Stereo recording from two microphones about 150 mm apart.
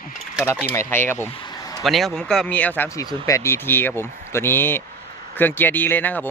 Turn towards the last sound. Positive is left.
turn(degrees=10)  # may be behind; listen again after turning